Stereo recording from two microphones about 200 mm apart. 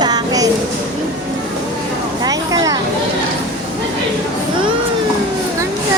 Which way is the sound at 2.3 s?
15° right (ahead or behind).